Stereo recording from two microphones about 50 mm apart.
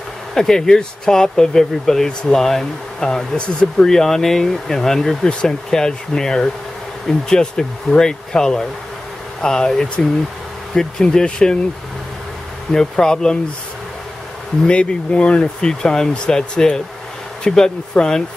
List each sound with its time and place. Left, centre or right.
0.3 s speech: centre
12.7 s speech: centre
14.7 s speech: centre